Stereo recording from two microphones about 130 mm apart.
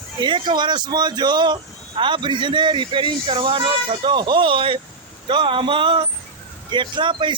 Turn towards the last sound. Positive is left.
turn(degrees=-40)  # may be behind; listen again after turning